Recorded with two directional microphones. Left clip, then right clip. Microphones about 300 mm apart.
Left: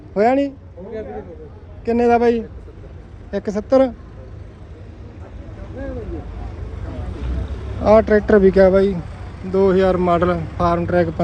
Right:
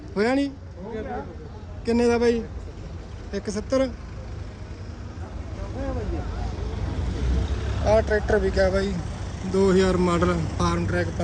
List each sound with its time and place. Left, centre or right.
0.1 s speech: centre
1.8 s speech: centre
7.9 s speech: centre